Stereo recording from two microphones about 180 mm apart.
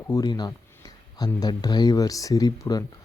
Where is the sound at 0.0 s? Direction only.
20° left (ahead or behind).